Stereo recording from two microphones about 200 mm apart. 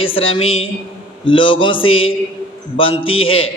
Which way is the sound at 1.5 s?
25° left (ahead or behind).